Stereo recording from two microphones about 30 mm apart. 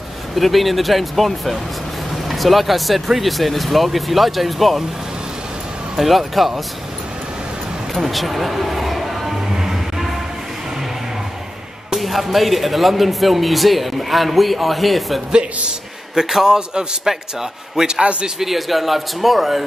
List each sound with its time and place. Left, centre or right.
0.4 s speech: centre
5.9 s speech: centre
7.9 s music: centre
12.0 s speech: centre
16.2 s a man's voice: centre
16.5 s a man's voice: right
17.1 s a man's voice: centre